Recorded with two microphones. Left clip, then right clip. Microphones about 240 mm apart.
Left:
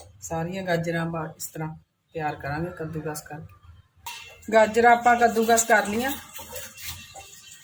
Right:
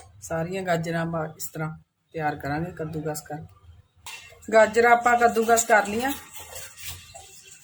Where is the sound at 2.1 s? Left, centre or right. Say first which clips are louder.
Right 2 dB; right.